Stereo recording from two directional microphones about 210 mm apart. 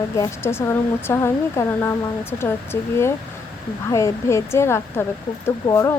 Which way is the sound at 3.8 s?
15° left (ahead or behind).